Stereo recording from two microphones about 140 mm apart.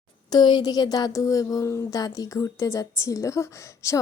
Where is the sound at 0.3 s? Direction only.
30° left (ahead or behind).